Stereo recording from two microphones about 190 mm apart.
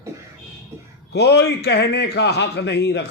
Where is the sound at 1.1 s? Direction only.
60° left (ahead or behind).